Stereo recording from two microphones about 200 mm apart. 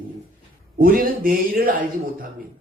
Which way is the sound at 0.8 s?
45° right (ahead or behind).